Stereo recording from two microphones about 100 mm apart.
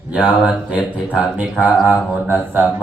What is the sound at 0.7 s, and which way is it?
A man's voice, 10° right (ahead or behind).